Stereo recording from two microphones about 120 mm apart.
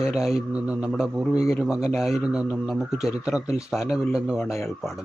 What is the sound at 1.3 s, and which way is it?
Speech, 25° left (ahead or behind).